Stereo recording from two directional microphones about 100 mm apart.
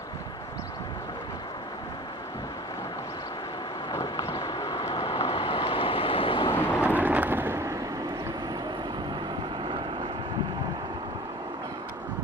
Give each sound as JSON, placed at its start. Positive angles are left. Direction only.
{"t": 4.4, "sound": "vehicle", "side_deg": 40}
{"t": 5.0, "sound": "vehicle", "side_deg": 70}
{"t": 6.5, "sound": "vehicle", "side_deg": 20}
{"t": 6.8, "sound": "a sound", "side_deg": -15}
{"t": 9.6, "sound": "vehicle", "side_deg": -55}